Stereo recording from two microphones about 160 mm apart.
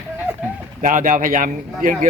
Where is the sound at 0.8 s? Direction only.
55° right (ahead or behind).